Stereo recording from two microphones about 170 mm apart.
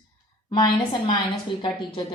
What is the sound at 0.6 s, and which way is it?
Speech, 25° left (ahead or behind).